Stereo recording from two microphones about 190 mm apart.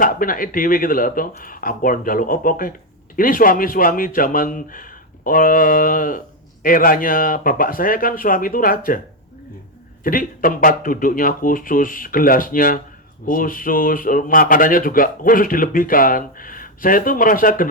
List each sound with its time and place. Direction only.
0.0 s speech: 45° left (ahead or behind)
10.0 s speech: 45° left (ahead or behind)